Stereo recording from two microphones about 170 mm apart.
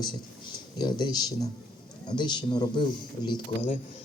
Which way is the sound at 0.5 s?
25° left (ahead or behind).